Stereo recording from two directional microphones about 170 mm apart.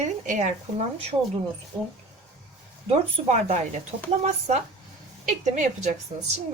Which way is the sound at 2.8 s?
40° right (ahead or behind).